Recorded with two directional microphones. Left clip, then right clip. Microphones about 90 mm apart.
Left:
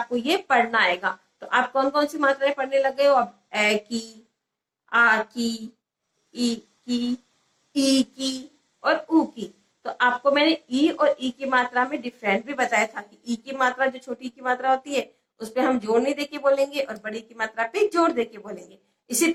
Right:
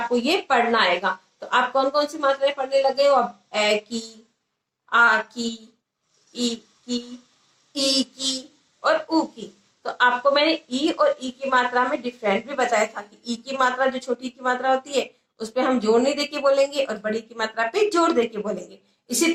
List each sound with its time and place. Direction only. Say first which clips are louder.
0.1 s a woman's voice: even; 20° right (ahead or behind)